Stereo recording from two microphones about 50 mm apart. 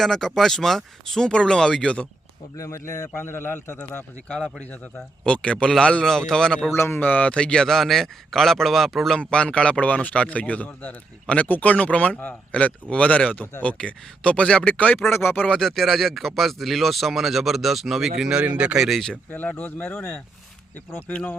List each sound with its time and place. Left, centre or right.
0.0 s speech: centre
2.6 s speech: left
3.2 s a man's voice: left
4.7 s speech: left
5.3 s speech: centre
6.7 s a man's voice: left
7.0 s speech: left; by 9.1 s centre
9.1 s speech: centre
15.1 s a man's voice: left
15.4 s speech: centre
18.3 s speech: right
19.3 s speech: left